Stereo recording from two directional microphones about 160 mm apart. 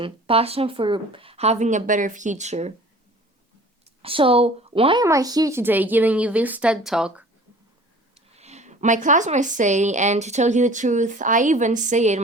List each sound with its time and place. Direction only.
0.0 s speech: 35° right (ahead or behind)
4.0 s speech: 35° right (ahead or behind)
5.0 s a woman's voice: 20° right (ahead or behind); by 7.3 s 5° right (ahead or behind)
8.3 s speech: 40° right (ahead or behind)